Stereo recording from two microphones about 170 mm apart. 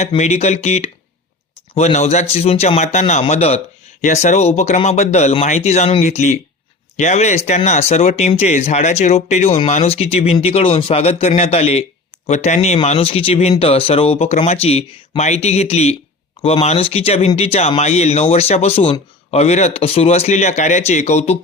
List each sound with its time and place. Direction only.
0.2 s speech: 40° left (ahead or behind)